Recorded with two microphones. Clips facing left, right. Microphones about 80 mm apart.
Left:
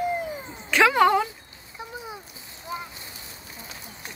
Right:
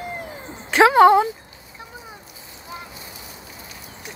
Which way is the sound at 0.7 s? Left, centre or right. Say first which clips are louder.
Right 6 dB; right.